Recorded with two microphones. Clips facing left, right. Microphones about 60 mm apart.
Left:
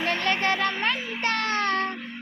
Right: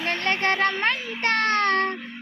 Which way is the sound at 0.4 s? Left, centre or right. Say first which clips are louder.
Right 4 dB; right.